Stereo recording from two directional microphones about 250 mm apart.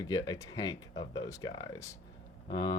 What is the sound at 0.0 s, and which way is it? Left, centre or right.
Speech, centre.